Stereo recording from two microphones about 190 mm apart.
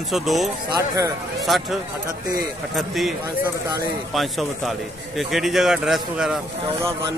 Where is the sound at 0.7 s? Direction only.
15° right (ahead or behind).